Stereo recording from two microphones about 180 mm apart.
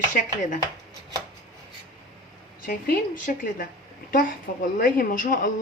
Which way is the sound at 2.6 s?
50° left (ahead or behind).